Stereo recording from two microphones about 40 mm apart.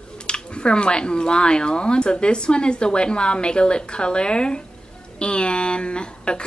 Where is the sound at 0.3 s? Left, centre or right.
Left.